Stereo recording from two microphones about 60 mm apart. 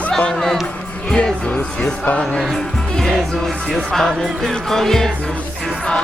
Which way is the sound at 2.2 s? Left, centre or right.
Centre.